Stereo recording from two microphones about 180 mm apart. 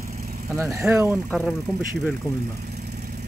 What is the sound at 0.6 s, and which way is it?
Speech, 15° right (ahead or behind).